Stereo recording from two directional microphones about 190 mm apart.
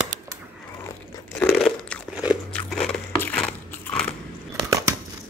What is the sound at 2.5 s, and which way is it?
Biting, 5° left (ahead or behind).